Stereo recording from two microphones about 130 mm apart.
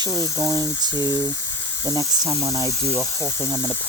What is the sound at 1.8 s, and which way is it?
Speech, 30° right (ahead or behind).